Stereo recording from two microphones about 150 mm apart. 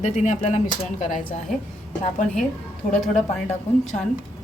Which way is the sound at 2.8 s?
55° left (ahead or behind).